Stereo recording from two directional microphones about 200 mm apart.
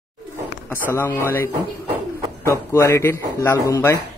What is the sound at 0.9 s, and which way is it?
A man's voice, 10° left (ahead or behind).